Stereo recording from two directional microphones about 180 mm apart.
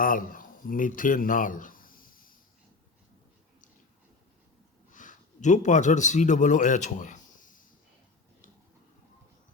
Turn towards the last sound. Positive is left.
turn(degrees=45)  # may be behind; listen again after turning